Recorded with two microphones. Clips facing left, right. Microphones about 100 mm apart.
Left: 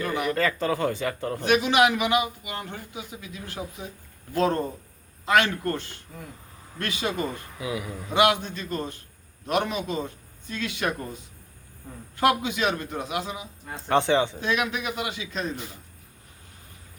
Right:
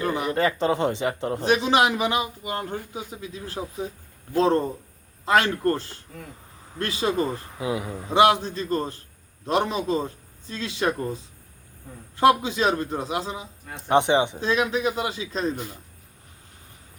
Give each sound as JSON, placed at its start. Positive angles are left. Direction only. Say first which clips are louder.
{"t": 0.0, "sound": "speech", "louder": "right 2 dB", "side_deg": -30}
{"t": 13.7, "sound": "speech", "louder": "right 2 dB", "side_deg": -20}
{"t": 14.4, "sound": "speech", "louder": "right 4 dB", "side_deg": -30}